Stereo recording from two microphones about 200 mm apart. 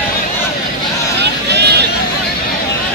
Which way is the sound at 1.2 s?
55° right (ahead or behind).